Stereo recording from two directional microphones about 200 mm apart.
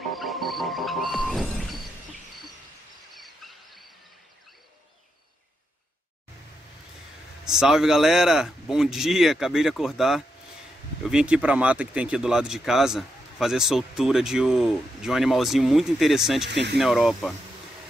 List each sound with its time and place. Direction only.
0.1 s music: centre (ahead or behind)
3.2 s a sound: centre (ahead or behind)
7.4 s speech: centre (ahead or behind)
16.4 s speech: 60° right (ahead or behind)
16.7 s speech: centre (ahead or behind)